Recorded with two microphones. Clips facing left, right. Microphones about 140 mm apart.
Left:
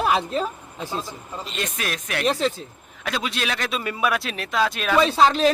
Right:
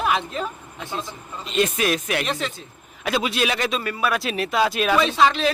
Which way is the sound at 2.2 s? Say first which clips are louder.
Left 5 dB; 35° left (ahead or behind).